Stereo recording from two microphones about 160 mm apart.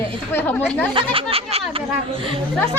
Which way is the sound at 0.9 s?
35° right (ahead or behind).